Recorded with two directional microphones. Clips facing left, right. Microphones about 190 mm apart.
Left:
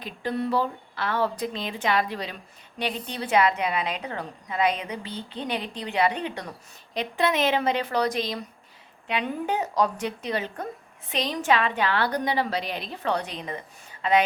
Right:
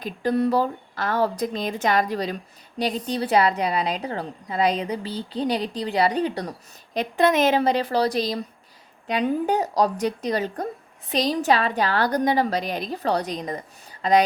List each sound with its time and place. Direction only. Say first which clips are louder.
0.0 s a woman's voice: right 6 dB; 40° right (ahead or behind)